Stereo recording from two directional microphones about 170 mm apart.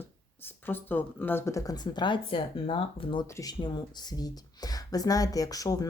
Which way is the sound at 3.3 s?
20° left (ahead or behind).